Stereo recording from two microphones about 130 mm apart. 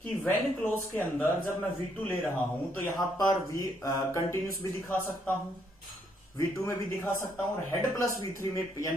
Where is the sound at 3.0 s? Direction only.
25° left (ahead or behind).